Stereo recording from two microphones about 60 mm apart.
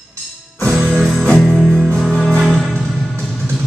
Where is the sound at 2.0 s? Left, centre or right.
Centre.